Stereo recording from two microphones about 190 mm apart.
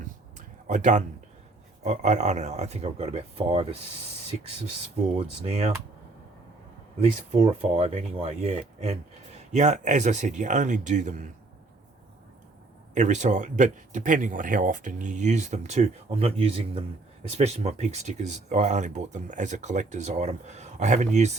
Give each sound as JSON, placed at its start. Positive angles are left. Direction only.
{"t": 0.0, "sound": "a sound", "side_deg": -40}
{"t": 1.8, "sound": "speech", "side_deg": -35}
{"t": 5.1, "sound": "speech", "side_deg": -30}
{"t": 7.0, "sound": "speech", "side_deg": -35}
{"t": 12.9, "sound": "speech", "side_deg": -40}